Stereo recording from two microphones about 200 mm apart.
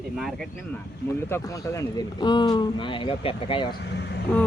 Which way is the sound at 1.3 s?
15° left (ahead or behind).